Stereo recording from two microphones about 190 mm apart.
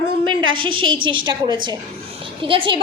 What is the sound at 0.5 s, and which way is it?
A woman's voice, 25° right (ahead or behind).